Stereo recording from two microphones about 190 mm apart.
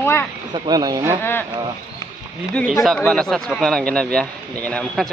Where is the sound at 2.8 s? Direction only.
5° left (ahead or behind).